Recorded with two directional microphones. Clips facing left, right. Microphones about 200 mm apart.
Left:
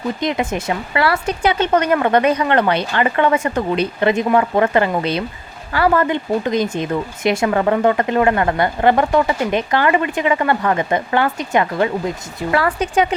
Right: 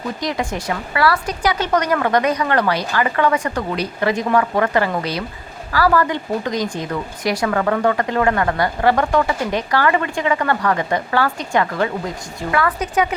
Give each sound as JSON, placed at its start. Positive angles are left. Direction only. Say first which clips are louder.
{"t": 0.2, "sound": "speech", "louder": "left 3 dB", "side_deg": 20}